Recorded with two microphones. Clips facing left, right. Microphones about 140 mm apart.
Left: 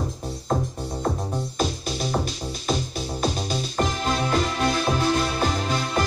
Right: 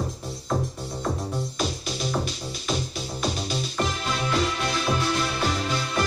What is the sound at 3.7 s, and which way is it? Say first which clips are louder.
Music: left 5 dB; 45° left (ahead or behind).